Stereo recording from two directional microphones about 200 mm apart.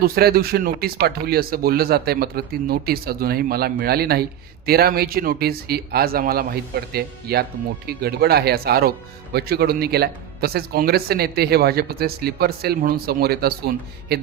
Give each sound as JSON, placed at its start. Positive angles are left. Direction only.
{"t": 0.0, "sound": "speech", "side_deg": -50}